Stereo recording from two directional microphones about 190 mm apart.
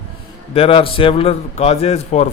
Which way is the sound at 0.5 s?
30° left (ahead or behind).